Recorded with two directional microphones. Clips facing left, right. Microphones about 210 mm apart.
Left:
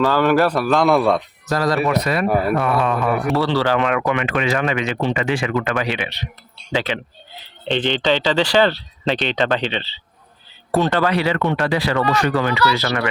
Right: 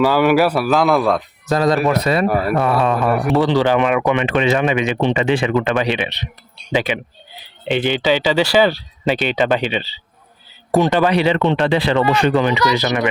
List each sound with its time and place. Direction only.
0.0 s a man's voice: 10° right (ahead or behind)
1.5 s speech: 20° right (ahead or behind)
2.2 s a man's voice: centre (ahead or behind)
2.6 s speech: 30° right (ahead or behind)
3.3 s speech: 15° right (ahead or behind)